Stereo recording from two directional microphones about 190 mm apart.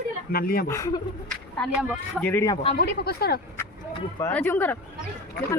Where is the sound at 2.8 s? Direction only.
55° left (ahead or behind).